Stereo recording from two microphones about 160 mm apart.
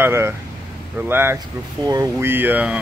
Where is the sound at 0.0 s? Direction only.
15° right (ahead or behind).